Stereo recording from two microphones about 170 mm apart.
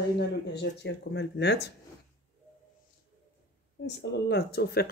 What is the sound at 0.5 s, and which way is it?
Speech, 90° left.